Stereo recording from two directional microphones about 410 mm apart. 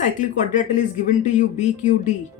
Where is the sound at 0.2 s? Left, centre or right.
Centre.